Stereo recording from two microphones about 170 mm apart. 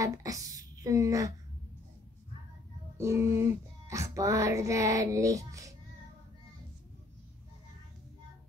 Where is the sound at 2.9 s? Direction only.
15° right (ahead or behind).